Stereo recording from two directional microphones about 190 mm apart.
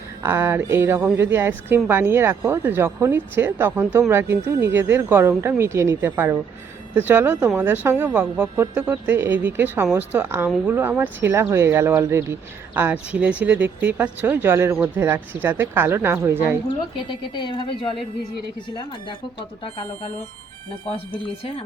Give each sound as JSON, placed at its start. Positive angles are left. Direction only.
{"t": 0.2, "sound": "speech", "side_deg": -10}
{"t": 17.1, "sound": "a woman's voice", "side_deg": 25}